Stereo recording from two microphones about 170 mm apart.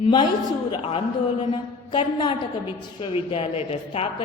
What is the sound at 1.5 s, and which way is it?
Mantra, 30° left (ahead or behind).